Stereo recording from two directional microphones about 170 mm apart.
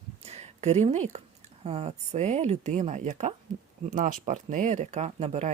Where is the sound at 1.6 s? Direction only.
40° right (ahead or behind).